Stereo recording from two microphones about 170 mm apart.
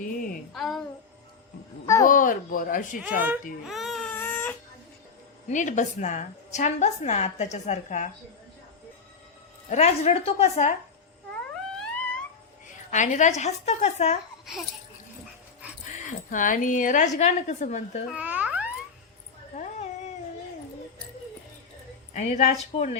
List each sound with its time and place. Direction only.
0.5 s a child's voice: centre (ahead or behind)
2.0 s a woman's voice: 50° left (ahead or behind)
3.2 s speech: 10° right (ahead or behind)
3.6 s baby cry: centre (ahead or behind)
5.5 s a woman's voice: 45° left (ahead or behind)
9.6 s a woman's voice: 40° left (ahead or behind)
11.3 s cat: 5° left (ahead or behind)
12.6 s a woman's voice: 50° left (ahead or behind)
15.9 s a woman's voice: 50° left (ahead or behind)
18.1 s a sound: 10° right (ahead or behind)
22.1 s a woman's voice: 40° left (ahead or behind)